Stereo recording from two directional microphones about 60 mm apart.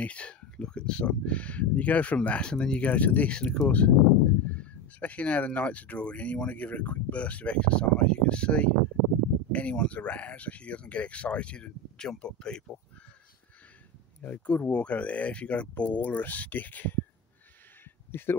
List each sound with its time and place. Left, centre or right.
0.0 s speech: left
14.2 s speech: left
18.2 s speech: left